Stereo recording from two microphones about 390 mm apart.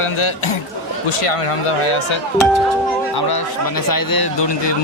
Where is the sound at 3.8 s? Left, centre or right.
Left.